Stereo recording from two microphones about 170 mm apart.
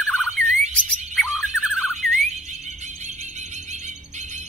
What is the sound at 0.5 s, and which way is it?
Bird, 45° right (ahead or behind).